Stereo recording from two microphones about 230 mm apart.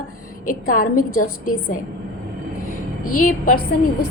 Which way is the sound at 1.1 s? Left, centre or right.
Left.